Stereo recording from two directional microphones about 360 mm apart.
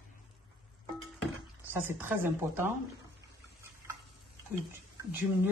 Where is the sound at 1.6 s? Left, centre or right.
Centre.